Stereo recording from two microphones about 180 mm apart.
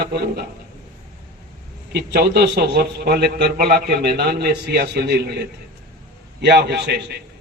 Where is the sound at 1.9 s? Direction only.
65° right (ahead or behind).